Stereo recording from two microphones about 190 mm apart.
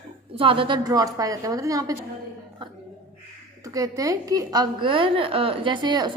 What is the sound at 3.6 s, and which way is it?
A woman's voice, 20° right (ahead or behind).